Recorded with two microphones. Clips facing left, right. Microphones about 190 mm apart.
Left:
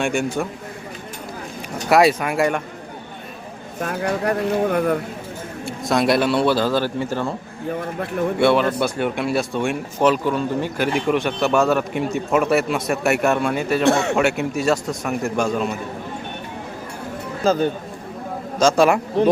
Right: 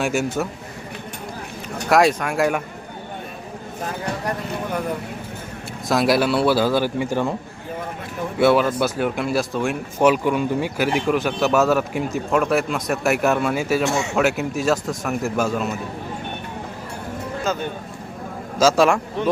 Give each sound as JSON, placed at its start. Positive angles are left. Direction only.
{"t": 0.0, "sound": "a man's voice", "side_deg": -5}
{"t": 1.9, "sound": "a man's voice", "side_deg": 5}
{"t": 3.8, "sound": "speech", "side_deg": 65}
{"t": 5.9, "sound": "a man's voice", "side_deg": 0}
{"t": 8.4, "sound": "a man's voice", "side_deg": -5}
{"t": 10.1, "sound": "a man's voice", "side_deg": -10}
{"t": 13.8, "sound": "speech", "side_deg": 60}
{"t": 14.2, "sound": "a man's voice", "side_deg": 0}
{"t": 17.5, "sound": "speech", "side_deg": 30}
{"t": 18.6, "sound": "a man's voice", "side_deg": 0}
{"t": 19.2, "sound": "speech", "side_deg": 35}